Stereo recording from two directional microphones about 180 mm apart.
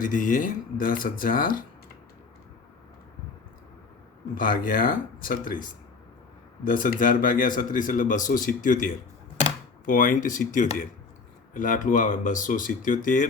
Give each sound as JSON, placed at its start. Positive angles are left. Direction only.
{"t": 0.0, "sound": "speech", "side_deg": 50}
{"t": 4.4, "sound": "speech", "side_deg": 50}
{"t": 6.7, "sound": "speech", "side_deg": 50}